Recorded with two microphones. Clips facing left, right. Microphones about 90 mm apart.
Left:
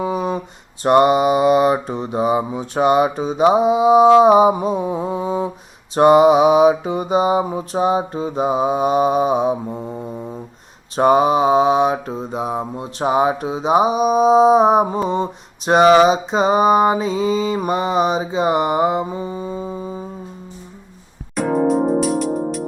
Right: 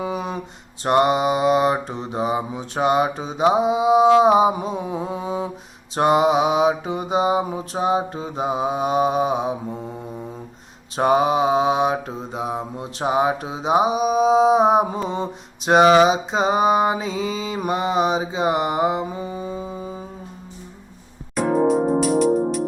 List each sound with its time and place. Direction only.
0.0 s a sound: centre (ahead or behind)
0.9 s mantra: centre (ahead or behind)
10.9 s mantra: centre (ahead or behind)
12.5 s mantra: 45° left (ahead or behind)
13.0 s mantra: centre (ahead or behind)
21.3 s music: centre (ahead or behind)